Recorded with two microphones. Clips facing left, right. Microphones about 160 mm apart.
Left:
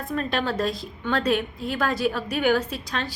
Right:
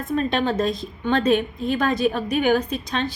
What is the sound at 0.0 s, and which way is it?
A woman's voice, 20° right (ahead or behind).